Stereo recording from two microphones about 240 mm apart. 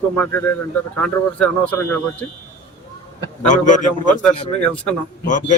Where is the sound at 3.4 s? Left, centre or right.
Left.